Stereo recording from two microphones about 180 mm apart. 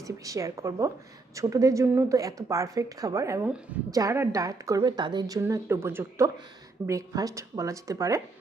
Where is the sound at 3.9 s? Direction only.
20° right (ahead or behind).